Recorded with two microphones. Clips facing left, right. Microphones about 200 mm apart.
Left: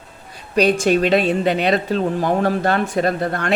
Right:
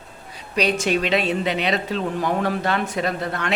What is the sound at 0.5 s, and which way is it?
Speech, 45° left (ahead or behind).